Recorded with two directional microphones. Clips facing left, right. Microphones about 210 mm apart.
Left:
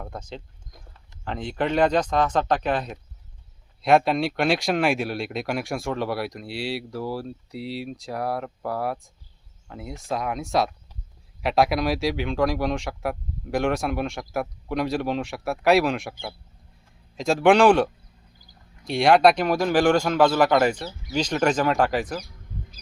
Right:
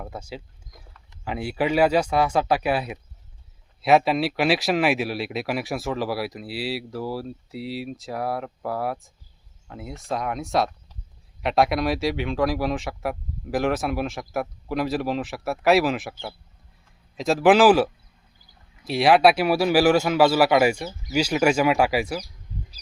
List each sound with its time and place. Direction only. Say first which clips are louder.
0.0 s a man's voice: right 1 dB; 5° right (ahead or behind)
17.2 s a man's voice: right 1 dB; centre (ahead or behind)